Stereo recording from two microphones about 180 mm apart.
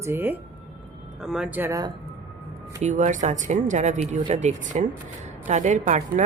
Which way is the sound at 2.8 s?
45° right (ahead or behind).